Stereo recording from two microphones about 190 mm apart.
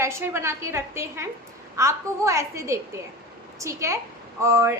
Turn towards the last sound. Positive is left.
turn(degrees=-15)  # may be behind; listen again after turning